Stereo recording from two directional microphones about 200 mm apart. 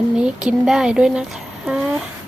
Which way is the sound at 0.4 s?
5° right (ahead or behind).